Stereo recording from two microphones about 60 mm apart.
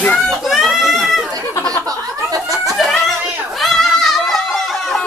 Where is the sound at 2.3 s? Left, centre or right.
Right.